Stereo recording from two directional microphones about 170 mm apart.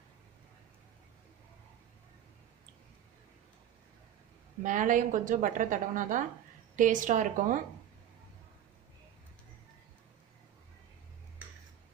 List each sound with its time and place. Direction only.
4.6 s a woman's voice: 50° right (ahead or behind)